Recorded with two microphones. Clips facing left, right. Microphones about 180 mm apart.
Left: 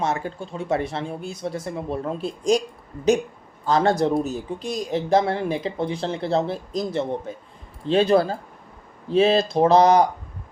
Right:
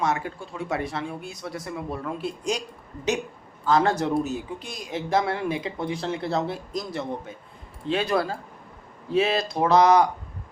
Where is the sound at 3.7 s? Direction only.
35° left (ahead or behind).